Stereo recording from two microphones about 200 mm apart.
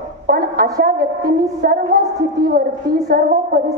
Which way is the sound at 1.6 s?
50° right (ahead or behind).